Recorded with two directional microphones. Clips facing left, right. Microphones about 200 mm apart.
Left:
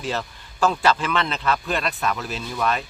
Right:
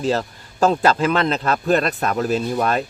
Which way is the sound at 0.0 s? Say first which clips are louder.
Right 7 dB; 35° right (ahead or behind).